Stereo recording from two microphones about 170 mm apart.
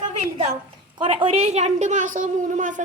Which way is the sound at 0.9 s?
30° right (ahead or behind).